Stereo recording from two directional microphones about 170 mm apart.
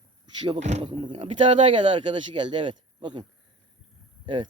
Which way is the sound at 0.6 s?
40° right (ahead or behind).